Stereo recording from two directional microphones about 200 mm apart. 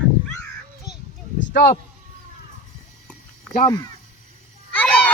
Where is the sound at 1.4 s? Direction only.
55° left (ahead or behind).